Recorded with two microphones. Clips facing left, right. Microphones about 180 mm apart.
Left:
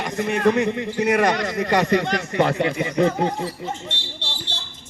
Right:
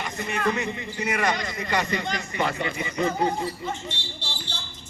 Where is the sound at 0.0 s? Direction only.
65° left (ahead or behind).